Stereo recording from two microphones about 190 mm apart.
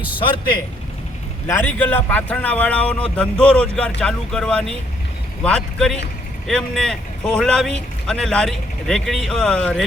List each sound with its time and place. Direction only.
0.2 s a man's voice: 25° left (ahead or behind)
1.5 s a man's voice: 10° left (ahead or behind)